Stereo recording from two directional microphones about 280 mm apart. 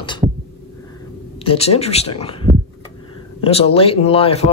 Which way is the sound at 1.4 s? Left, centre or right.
Left.